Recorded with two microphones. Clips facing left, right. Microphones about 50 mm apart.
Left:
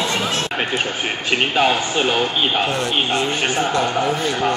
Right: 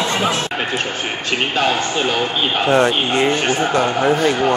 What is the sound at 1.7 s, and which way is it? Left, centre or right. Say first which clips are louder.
Speech: even; centre.